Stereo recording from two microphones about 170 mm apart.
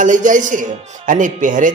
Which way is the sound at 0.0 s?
50° right (ahead or behind).